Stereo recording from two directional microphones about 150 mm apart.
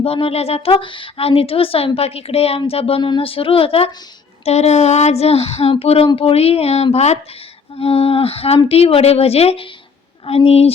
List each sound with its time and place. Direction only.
0.0 s a woman's voice: 40° left (ahead or behind)